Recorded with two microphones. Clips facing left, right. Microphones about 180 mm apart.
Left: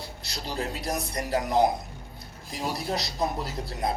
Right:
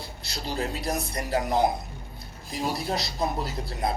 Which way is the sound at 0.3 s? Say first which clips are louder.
Right 2 dB; 30° right (ahead or behind).